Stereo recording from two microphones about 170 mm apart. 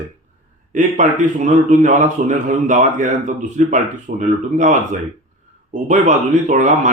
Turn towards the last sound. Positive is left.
turn(degrees=-45)  # may be behind; listen again after turning